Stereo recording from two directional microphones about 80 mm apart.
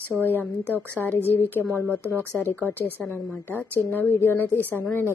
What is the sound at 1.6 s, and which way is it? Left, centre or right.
Speech, right.